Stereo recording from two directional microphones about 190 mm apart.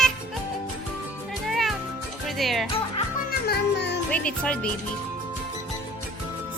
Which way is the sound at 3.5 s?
60° left (ahead or behind).